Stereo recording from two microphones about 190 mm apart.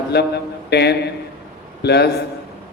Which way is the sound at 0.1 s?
60° left (ahead or behind).